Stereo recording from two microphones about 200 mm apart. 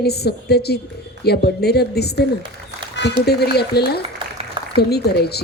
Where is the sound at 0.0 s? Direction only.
55° left (ahead or behind).